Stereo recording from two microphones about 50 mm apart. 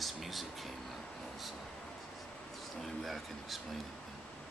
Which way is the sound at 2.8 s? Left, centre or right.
Centre.